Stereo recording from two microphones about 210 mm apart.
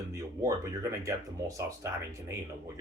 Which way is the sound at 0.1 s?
15° right (ahead or behind).